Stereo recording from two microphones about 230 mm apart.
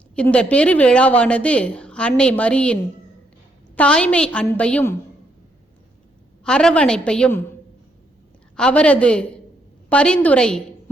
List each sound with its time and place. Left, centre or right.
0.2 s a woman's voice: centre
3.8 s a woman's voice: centre
6.4 s a woman's voice: centre
8.5 s a woman's voice: centre